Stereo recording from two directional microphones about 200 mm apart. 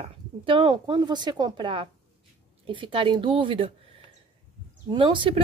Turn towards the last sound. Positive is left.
turn(degrees=-25)  # may be behind; listen again after turning